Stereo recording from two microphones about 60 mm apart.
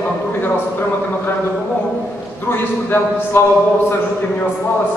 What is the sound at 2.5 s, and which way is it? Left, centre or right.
Speech, left.